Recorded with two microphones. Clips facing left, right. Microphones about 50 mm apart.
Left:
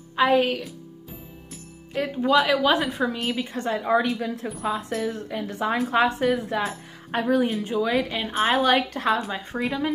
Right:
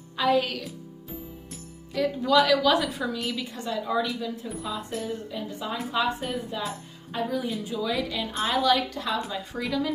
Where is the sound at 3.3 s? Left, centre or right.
Left.